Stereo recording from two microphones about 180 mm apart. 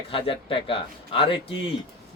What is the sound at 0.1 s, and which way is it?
A man's voice, 30° left (ahead or behind).